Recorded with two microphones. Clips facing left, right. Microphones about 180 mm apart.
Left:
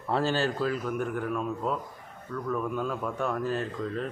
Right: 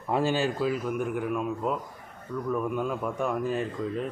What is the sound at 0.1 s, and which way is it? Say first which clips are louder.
Speech: right 1 dB; 10° right (ahead or behind).